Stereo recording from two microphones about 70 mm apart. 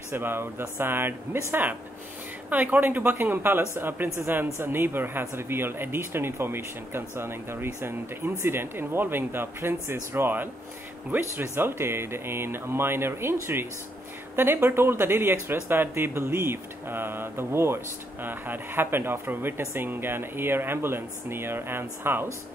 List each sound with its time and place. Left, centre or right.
0.1 s speech: right